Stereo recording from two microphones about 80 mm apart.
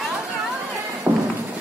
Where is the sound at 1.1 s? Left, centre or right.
Centre.